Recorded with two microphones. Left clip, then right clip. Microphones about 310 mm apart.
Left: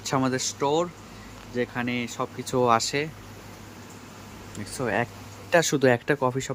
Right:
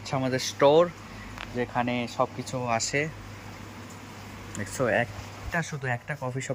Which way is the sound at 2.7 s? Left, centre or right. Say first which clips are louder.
Left 2 dB; centre.